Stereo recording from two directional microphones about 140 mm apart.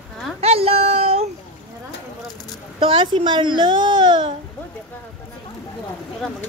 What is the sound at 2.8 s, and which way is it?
Speech, 40° right (ahead or behind).